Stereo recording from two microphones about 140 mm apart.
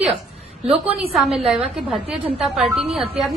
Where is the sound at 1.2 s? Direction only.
Centre (ahead or behind).